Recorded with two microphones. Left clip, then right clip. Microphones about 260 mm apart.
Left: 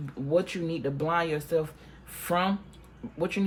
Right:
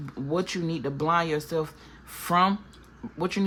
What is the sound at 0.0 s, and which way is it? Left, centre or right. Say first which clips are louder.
Speech: left 2 dB; right.